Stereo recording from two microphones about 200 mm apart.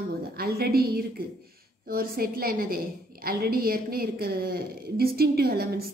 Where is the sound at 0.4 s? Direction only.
50° right (ahead or behind).